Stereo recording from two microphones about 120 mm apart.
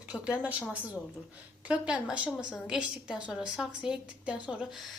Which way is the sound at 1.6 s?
10° right (ahead or behind).